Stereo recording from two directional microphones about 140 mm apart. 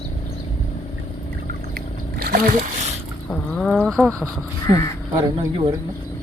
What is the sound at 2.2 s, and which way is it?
Speech, 90° right.